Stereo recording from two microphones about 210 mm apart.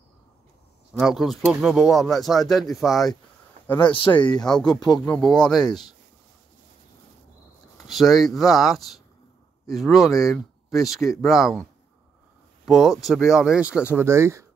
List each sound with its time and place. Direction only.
0.9 s speech: centre (ahead or behind)
3.8 s speech: 25° left (ahead or behind)
4.5 s speech: 5° left (ahead or behind)
7.7 s speech: centre (ahead or behind)
12.6 s speech: centre (ahead or behind)